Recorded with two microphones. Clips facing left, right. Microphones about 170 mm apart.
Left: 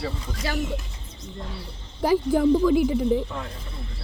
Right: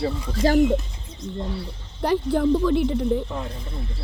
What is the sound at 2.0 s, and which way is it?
Speech, 5° left (ahead or behind).